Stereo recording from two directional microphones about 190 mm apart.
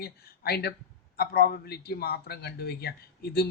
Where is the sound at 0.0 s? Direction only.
55° left (ahead or behind).